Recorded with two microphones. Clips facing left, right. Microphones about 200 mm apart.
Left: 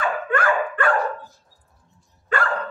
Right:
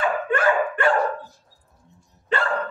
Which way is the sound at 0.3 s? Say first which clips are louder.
Right 1 dB; 25° right (ahead or behind).